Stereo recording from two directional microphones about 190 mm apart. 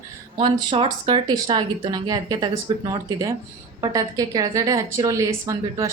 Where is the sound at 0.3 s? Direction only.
30° right (ahead or behind).